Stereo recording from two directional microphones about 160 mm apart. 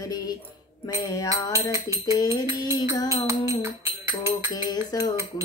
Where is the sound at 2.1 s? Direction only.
20° left (ahead or behind).